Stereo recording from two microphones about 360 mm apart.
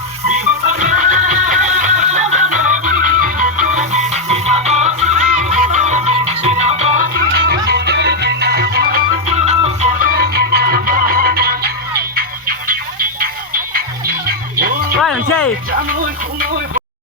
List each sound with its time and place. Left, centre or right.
0.8 s music: right